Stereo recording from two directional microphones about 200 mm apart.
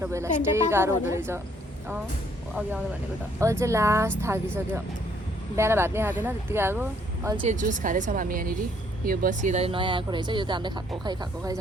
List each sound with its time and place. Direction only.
0.0 s a woman's voice: 15° right (ahead or behind)
3.4 s a woman's voice: 15° right (ahead or behind)
7.4 s speech: 40° right (ahead or behind); by 11.6 s 20° right (ahead or behind)